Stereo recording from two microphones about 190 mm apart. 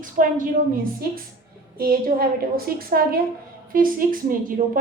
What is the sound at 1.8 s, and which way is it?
A woman's voice, 50° right (ahead or behind).